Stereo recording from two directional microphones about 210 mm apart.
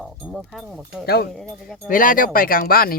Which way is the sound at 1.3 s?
Centre (ahead or behind).